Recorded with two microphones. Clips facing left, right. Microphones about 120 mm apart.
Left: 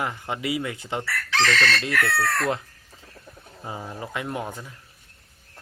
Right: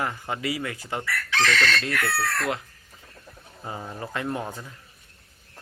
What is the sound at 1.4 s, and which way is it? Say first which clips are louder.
Chicken: left 1 dB; 35° left (ahead or behind).